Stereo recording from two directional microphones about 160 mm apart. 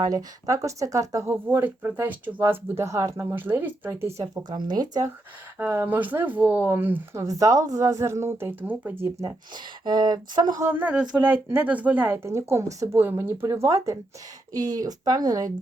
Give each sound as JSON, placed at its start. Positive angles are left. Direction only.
{"t": 0.0, "sound": "speech", "side_deg": -25}
{"t": 4.4, "sound": "speech", "side_deg": -25}
{"t": 5.5, "sound": "speech", "side_deg": -10}
{"t": 10.5, "sound": "speech", "side_deg": -15}